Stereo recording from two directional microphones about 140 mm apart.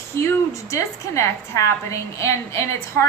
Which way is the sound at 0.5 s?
20° left (ahead or behind).